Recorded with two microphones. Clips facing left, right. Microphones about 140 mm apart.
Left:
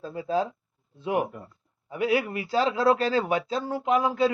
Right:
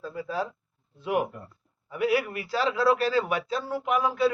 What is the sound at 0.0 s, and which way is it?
Speech, 25° left (ahead or behind).